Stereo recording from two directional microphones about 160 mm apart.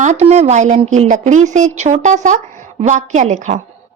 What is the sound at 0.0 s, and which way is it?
A woman's voice, 45° right (ahead or behind).